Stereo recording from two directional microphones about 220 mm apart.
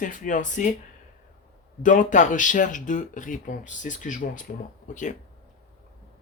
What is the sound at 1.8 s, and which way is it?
Speech, 35° left (ahead or behind).